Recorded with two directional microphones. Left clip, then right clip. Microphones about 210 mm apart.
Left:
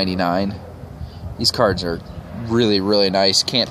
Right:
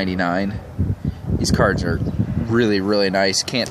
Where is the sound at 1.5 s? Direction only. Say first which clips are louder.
Even; centre (ahead or behind).